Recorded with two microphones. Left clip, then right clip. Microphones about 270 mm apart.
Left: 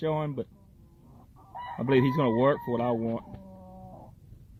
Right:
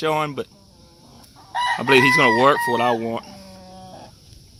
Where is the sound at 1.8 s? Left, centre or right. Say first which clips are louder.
Right 10 dB; centre.